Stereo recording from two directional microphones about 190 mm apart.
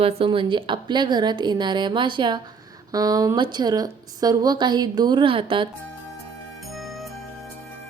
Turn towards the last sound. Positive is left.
turn(degrees=0)  # may be behind; listen again after turning